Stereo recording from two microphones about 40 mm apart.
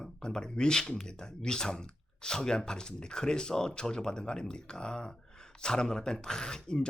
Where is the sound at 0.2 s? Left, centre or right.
Centre.